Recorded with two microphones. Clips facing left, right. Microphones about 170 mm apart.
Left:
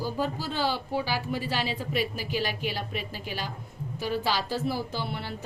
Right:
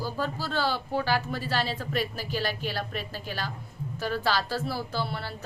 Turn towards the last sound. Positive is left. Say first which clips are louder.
# right 1 dB
turn(degrees=15)  # may be behind; listen again after turning